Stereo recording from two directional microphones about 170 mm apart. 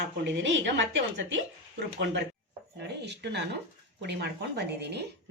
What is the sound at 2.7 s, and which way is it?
Speech, 85° right.